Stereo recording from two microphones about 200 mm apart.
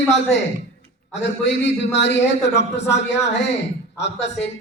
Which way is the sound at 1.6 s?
60° left (ahead or behind).